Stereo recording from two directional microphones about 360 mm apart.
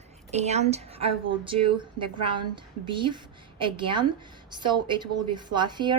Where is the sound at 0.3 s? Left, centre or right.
Centre.